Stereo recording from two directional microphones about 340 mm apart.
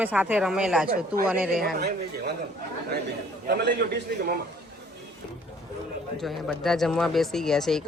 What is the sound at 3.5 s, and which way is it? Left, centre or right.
Speech, right.